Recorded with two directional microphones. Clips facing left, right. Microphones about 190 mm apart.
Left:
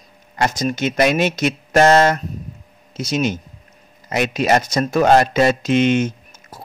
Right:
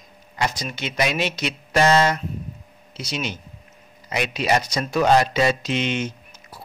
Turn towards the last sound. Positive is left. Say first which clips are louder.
# left 3 dB
turn(degrees=50)  # may be behind; listen again after turning